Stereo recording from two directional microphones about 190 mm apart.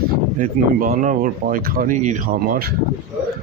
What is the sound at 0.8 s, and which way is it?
Speech, 40° right (ahead or behind).